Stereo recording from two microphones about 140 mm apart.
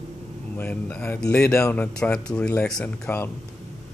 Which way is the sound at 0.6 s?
10° left (ahead or behind).